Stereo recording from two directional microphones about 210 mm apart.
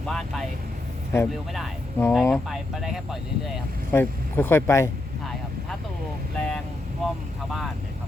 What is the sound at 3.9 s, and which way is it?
Speech, 10° left (ahead or behind).